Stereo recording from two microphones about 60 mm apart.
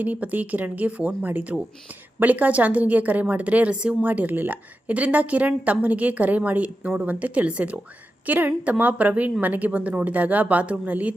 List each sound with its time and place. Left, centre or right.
0.0 s speech: right